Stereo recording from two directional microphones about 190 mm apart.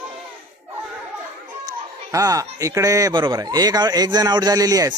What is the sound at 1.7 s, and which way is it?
Speech, 20° right (ahead or behind).